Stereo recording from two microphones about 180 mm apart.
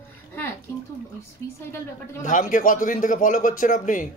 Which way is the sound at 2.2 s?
45° left (ahead or behind).